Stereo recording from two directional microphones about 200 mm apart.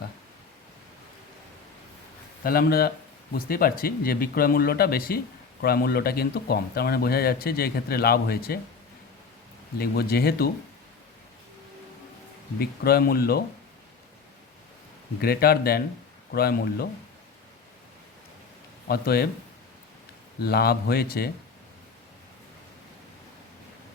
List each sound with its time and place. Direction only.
2.4 s speech: 50° left (ahead or behind)
9.7 s speech: 50° left (ahead or behind)
12.5 s speech: 50° left (ahead or behind)
15.2 s speech: 50° left (ahead or behind)
18.9 s speech: 50° left (ahead or behind)
20.4 s speech: 50° left (ahead or behind)